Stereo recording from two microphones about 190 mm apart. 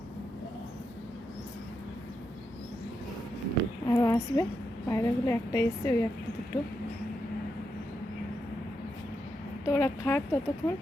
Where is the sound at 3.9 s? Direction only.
15° left (ahead or behind).